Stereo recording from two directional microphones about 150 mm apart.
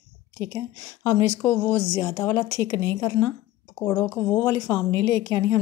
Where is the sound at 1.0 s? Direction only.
20° left (ahead or behind).